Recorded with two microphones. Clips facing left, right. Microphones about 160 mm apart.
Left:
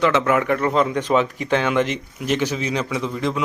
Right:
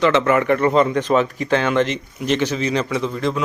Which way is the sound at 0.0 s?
5° left (ahead or behind).